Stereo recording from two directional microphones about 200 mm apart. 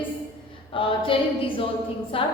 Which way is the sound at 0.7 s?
25° left (ahead or behind).